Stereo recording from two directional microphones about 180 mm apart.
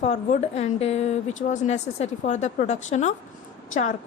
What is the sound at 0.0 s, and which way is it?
A woman's voice, 40° left (ahead or behind).